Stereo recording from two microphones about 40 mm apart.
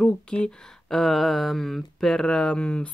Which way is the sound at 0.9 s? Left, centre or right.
Centre.